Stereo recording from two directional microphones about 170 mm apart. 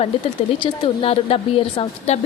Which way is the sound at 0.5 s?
30° left (ahead or behind).